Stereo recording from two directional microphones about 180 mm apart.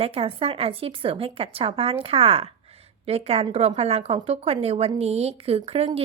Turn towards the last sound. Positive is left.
turn(degrees=-35)  # may be behind; listen again after turning